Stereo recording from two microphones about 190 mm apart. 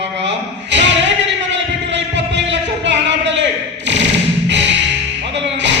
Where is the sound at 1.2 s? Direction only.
70° right (ahead or behind).